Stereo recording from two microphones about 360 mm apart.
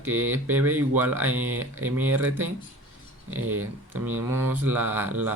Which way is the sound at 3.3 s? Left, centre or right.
Right.